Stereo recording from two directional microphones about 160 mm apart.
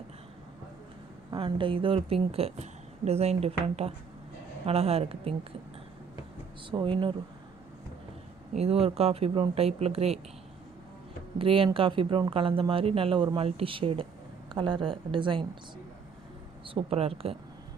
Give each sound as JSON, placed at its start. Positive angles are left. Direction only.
{"t": 1.3, "sound": "speech", "side_deg": -30}
{"t": 6.7, "sound": "speech", "side_deg": -30}
{"t": 8.5, "sound": "speech", "side_deg": -40}
{"t": 11.3, "sound": "speech", "side_deg": -35}
{"t": 16.6, "sound": "speech", "side_deg": -35}